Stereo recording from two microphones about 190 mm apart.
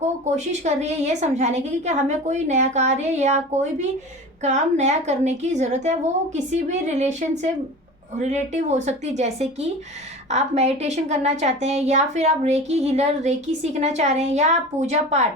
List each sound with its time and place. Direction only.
0.0 s a woman's voice: 35° right (ahead or behind)